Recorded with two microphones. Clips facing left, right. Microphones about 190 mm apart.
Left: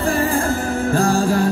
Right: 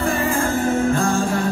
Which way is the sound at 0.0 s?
35° left (ahead or behind).